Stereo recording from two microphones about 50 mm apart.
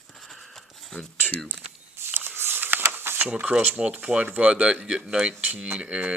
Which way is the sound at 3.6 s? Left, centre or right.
Right.